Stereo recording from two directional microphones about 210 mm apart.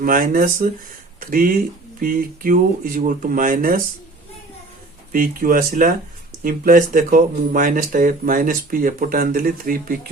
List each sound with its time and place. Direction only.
0.0 s speech: 40° right (ahead or behind)
5.1 s speech: 40° right (ahead or behind)